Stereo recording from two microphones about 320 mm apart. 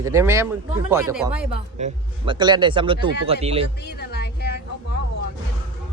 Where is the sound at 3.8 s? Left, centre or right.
Left.